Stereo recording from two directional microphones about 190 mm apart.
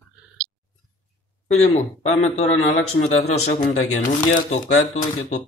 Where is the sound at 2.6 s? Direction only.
90° left.